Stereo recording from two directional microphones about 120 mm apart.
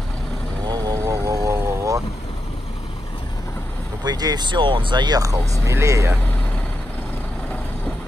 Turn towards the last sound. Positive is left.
turn(degrees=10)  # may be behind; listen again after turning